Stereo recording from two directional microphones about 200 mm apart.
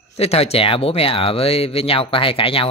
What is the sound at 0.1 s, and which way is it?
Speech, 30° left (ahead or behind).